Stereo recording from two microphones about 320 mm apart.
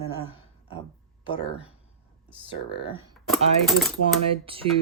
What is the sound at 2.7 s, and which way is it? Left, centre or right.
Speech, centre.